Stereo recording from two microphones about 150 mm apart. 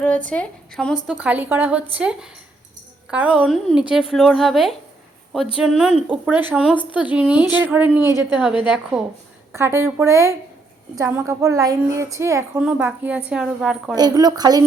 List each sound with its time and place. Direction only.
0.3 s a woman's voice: 5° left (ahead or behind)
1.0 s a woman's voice: 5° right (ahead or behind)
12.5 s a woman's voice: 10° right (ahead or behind)
13.9 s a woman's voice: 25° right (ahead or behind)